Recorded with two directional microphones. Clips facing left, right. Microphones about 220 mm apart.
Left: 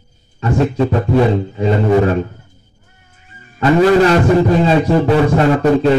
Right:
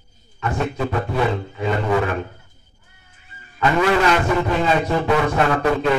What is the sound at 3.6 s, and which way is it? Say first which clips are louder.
Speech: left 7 dB; 35° left (ahead or behind).